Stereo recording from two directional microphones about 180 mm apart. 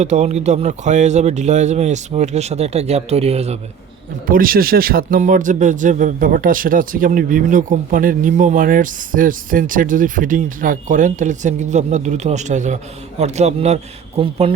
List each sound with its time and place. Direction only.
0.0 s speech: 40° right (ahead or behind)
4.3 s a man's voice: 55° right (ahead or behind); by 14.5 s 30° right (ahead or behind)